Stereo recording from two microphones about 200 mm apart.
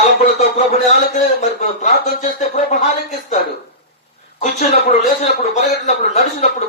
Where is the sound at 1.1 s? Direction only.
40° left (ahead or behind).